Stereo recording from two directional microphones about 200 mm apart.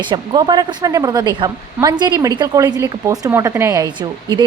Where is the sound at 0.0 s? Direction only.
25° right (ahead or behind).